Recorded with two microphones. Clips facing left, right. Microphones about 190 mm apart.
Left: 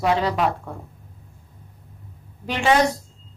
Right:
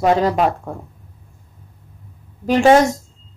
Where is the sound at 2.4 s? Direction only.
45° right (ahead or behind).